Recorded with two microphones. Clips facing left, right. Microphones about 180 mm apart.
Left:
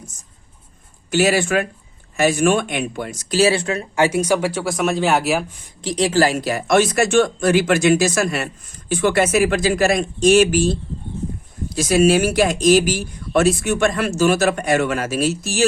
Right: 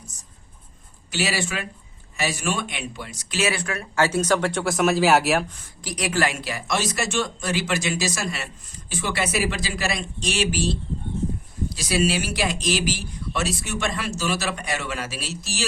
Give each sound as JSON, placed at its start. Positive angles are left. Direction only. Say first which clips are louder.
{"t": 1.1, "sound": "speech", "louder": "left 10 dB", "side_deg": 50}
{"t": 5.8, "sound": "speech", "louder": "left 7 dB", "side_deg": 25}